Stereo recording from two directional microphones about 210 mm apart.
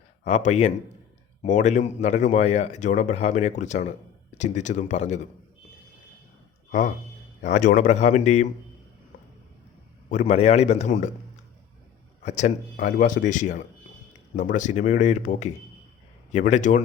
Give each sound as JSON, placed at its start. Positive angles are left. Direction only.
{"t": 0.3, "sound": "speech", "side_deg": 30}
{"t": 6.7, "sound": "a man's voice", "side_deg": 35}
{"t": 10.1, "sound": "speech", "side_deg": 35}
{"t": 12.2, "sound": "speech", "side_deg": 35}